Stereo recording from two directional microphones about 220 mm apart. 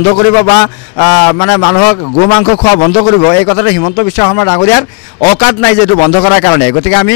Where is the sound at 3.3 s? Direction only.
20° left (ahead or behind).